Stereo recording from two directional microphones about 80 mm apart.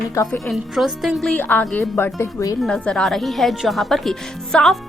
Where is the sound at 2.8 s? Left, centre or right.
Centre.